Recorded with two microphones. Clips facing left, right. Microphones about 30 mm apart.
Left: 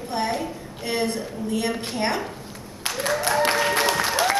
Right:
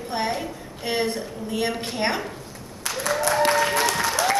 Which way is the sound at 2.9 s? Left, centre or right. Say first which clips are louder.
Left 1 dB; left.